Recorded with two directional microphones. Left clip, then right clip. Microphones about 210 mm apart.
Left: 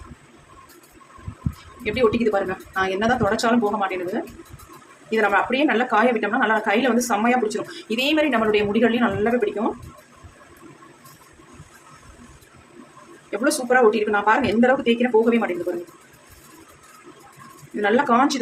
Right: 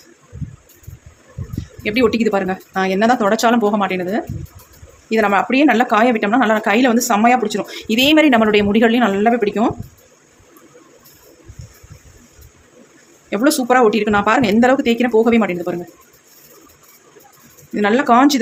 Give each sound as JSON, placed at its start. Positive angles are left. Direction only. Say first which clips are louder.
{"t": 1.8, "sound": "a woman's voice", "louder": "right 4 dB", "side_deg": -40}
{"t": 5.0, "sound": "a woman's voice", "louder": "right 4 dB", "side_deg": -35}
{"t": 13.3, "sound": "a woman's voice", "louder": "right 5 dB", "side_deg": -35}
{"t": 17.7, "sound": "a woman's voice", "louder": "right 5 dB", "side_deg": -35}